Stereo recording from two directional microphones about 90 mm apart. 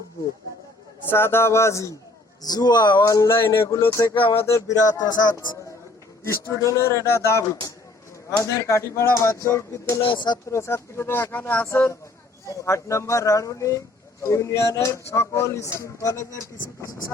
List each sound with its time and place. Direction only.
1.1 s speech: 25° left (ahead or behind)
2.4 s speech: 45° left (ahead or behind)
3.1 s speech: 35° left (ahead or behind)
4.1 s a sound: 70° left (ahead or behind)
4.9 s speech: 50° left (ahead or behind)
6.2 s speech: 30° left (ahead or behind)
10.0 s speech: 65° left (ahead or behind)
10.5 s speech: 30° left (ahead or behind)